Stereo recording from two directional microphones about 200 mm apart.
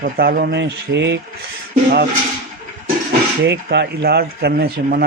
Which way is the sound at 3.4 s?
60° right (ahead or behind).